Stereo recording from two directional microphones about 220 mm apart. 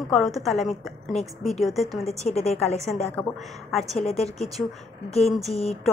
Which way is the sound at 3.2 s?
5° left (ahead or behind).